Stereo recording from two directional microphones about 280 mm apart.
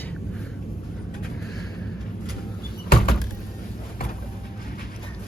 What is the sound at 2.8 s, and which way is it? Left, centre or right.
Door, left.